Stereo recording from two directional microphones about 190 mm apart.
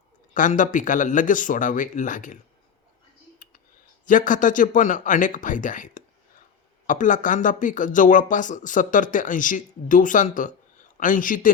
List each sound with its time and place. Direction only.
0.3 s speech: 45° left (ahead or behind)
3.3 s a sound: 45° left (ahead or behind)
4.0 s speech: 45° left (ahead or behind)